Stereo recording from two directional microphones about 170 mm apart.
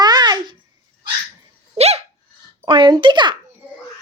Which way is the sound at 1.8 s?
40° right (ahead or behind).